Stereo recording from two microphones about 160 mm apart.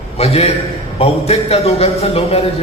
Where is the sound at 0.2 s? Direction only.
40° left (ahead or behind).